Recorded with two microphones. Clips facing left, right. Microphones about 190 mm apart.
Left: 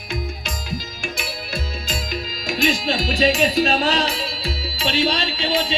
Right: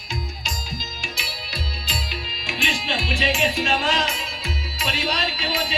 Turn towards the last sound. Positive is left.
turn(degrees=25)  # may be behind; listen again after turning